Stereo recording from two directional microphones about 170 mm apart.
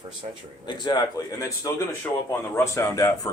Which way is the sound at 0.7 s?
25° left (ahead or behind).